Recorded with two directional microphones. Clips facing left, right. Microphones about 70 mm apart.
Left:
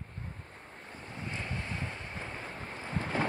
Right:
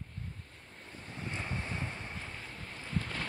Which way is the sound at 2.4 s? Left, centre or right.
Left.